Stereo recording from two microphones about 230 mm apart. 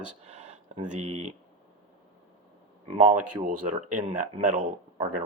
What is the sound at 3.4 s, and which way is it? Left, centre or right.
Speech, right.